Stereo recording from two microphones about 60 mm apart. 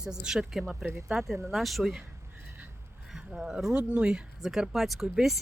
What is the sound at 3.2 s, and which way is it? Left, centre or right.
Speech, centre.